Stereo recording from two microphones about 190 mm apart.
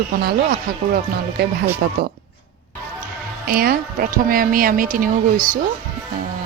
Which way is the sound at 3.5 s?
50° right (ahead or behind).